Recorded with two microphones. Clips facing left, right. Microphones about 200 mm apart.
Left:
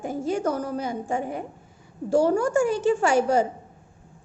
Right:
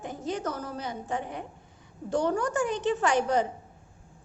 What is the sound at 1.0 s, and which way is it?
Speech, 45° left (ahead or behind).